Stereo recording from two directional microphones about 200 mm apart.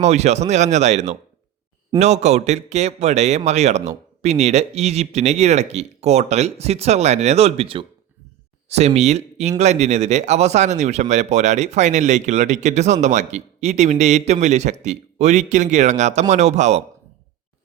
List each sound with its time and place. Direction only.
0.0 s speech: 35° right (ahead or behind)